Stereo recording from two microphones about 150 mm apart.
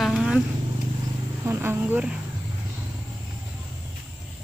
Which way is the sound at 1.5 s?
15° right (ahead or behind).